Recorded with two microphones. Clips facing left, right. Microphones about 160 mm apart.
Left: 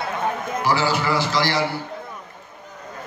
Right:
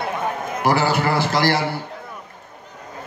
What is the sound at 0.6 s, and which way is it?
A man's voice, 55° right (ahead or behind).